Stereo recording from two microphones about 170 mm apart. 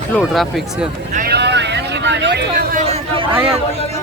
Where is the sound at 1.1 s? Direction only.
65° right (ahead or behind).